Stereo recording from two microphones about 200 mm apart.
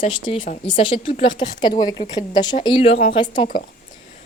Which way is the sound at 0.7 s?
25° left (ahead or behind).